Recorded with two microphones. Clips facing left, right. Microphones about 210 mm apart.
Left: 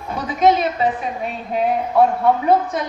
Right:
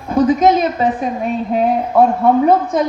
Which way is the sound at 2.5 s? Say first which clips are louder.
Right 3 dB; 45° right (ahead or behind).